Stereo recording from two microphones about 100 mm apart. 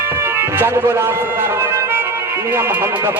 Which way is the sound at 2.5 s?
25° right (ahead or behind).